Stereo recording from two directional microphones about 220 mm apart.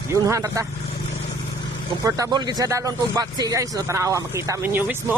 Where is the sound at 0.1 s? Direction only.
15° right (ahead or behind).